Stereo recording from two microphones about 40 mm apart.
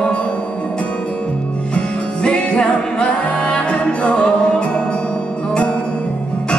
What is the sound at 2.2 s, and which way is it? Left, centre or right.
Music, left.